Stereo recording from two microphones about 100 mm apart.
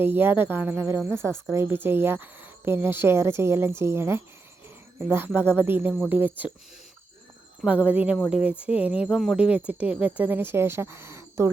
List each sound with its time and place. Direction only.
0.0 s speech: 20° right (ahead or behind)
7.6 s speech: 10° right (ahead or behind)
9.0 s speech: centre (ahead or behind)
9.3 s speech: 10° right (ahead or behind); by 11.5 s 30° right (ahead or behind)